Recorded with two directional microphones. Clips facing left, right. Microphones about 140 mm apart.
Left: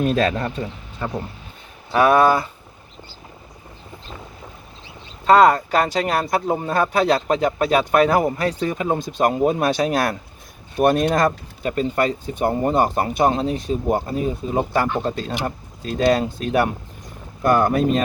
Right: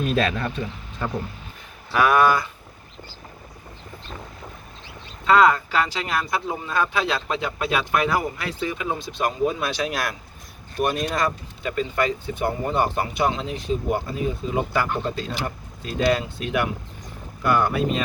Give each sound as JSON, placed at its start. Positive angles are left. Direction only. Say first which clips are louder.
{"t": 0.0, "sound": "speech", "louder": "left 3 dB", "side_deg": 35}
{"t": 1.9, "sound": "speech", "louder": "left 3 dB", "side_deg": 30}
{"t": 5.2, "sound": "speech", "louder": "left 4 dB", "side_deg": 40}
{"t": 10.8, "sound": "speech", "louder": "left 7 dB", "side_deg": 55}